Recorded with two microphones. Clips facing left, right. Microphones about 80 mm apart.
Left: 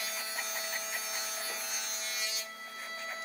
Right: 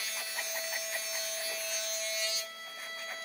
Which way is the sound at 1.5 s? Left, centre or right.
Left.